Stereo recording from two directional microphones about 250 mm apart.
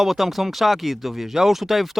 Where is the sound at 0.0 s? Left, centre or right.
Centre.